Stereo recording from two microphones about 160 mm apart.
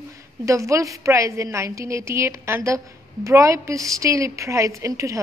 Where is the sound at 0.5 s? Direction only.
20° right (ahead or behind).